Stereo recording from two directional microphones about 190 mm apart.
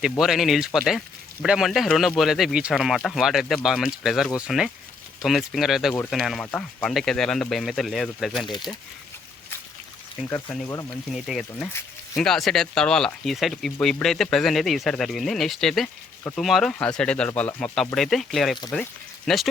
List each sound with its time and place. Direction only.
0.0 s speech: centre (ahead or behind)
10.2 s speech: 15° left (ahead or behind)
11.1 s speech: centre (ahead or behind)